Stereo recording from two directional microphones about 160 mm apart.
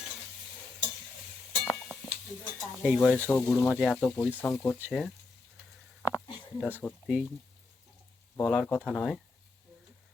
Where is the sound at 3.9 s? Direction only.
10° left (ahead or behind).